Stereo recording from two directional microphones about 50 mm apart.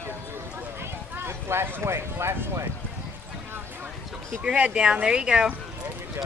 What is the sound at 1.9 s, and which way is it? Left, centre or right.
Speech, right.